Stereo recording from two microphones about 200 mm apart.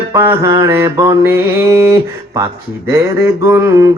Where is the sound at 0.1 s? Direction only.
15° right (ahead or behind).